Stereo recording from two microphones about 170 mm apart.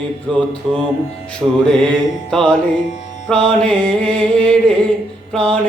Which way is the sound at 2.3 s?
5° left (ahead or behind).